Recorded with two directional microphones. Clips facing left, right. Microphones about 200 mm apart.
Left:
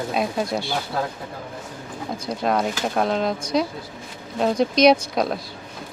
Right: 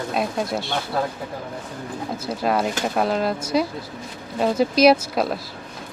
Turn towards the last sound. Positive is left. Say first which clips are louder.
# even
turn(degrees=-5)  # may be behind; listen again after turning